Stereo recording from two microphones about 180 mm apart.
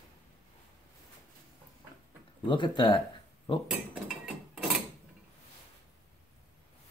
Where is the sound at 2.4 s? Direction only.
25° left (ahead or behind).